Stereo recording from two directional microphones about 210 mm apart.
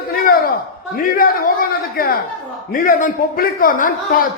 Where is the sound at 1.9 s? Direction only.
45° left (ahead or behind).